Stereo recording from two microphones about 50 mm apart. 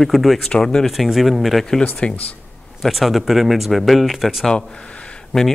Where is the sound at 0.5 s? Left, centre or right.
Centre.